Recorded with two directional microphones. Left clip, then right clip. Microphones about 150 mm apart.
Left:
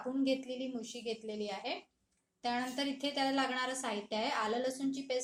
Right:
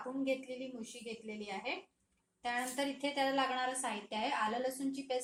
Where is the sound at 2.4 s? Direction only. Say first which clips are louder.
Left 1 dB; 60° left (ahead or behind).